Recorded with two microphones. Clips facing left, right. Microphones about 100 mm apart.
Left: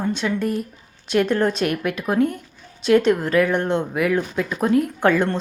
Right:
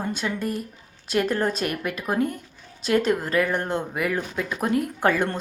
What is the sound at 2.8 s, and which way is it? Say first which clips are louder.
Speech: left 5 dB; centre (ahead or behind).